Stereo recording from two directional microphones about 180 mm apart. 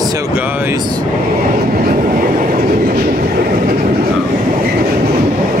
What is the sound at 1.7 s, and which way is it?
Train, 50° right (ahead or behind).